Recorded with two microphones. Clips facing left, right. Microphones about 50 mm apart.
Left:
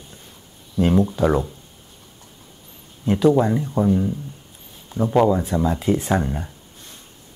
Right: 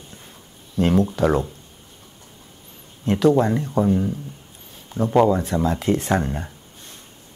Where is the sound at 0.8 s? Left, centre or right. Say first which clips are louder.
Left 1 dB; right.